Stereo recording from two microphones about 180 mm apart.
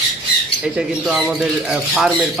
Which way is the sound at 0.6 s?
5° right (ahead or behind).